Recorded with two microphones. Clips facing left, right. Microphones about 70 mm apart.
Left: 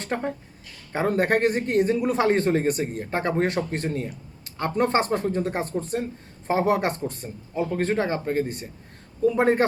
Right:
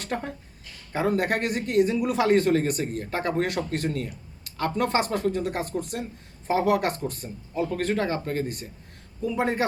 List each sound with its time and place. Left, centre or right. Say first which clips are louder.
0.0 s speech: left 3 dB; left
9.2 s speech: left 6 dB; left